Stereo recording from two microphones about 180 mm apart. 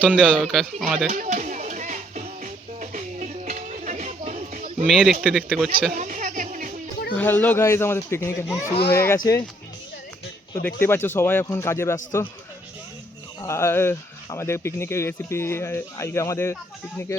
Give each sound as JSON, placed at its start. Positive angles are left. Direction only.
{"t": 0.0, "sound": "speech", "side_deg": -5}
{"t": 1.0, "sound": "music", "side_deg": -45}
{"t": 4.9, "sound": "speech", "side_deg": 0}
{"t": 5.9, "sound": "music", "side_deg": -45}
{"t": 7.2, "sound": "speech", "side_deg": 10}
{"t": 10.8, "sound": "speech", "side_deg": 10}
{"t": 13.4, "sound": "speech", "side_deg": 15}